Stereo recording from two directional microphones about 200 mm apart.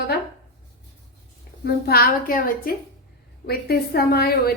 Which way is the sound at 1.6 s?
50° left (ahead or behind).